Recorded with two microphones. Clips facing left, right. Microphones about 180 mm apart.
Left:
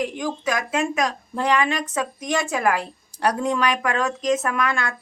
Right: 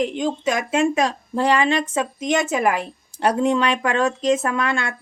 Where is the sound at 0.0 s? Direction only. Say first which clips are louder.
Right 4 dB; 25° right (ahead or behind).